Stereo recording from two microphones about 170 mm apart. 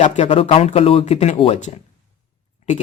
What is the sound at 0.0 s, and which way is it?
Speech, 35° left (ahead or behind).